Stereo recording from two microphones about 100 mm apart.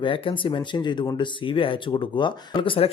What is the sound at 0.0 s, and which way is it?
Speech, 60° left (ahead or behind).